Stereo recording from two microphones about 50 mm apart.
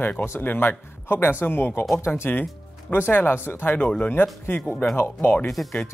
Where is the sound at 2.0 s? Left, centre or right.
Left.